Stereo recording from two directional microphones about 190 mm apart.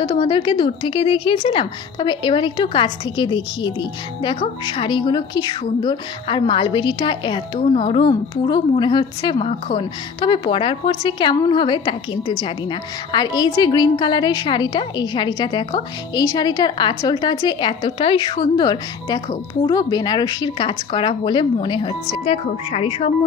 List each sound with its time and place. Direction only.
0.0 s a woman's voice: 25° left (ahead or behind)